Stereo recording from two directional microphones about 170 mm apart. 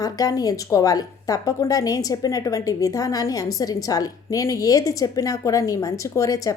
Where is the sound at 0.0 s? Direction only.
20° left (ahead or behind).